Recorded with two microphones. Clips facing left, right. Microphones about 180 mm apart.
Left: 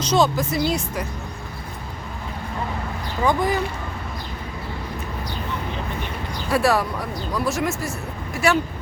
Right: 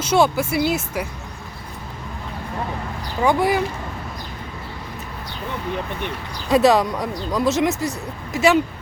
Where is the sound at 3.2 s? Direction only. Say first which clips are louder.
Right 3 dB; 10° right (ahead or behind).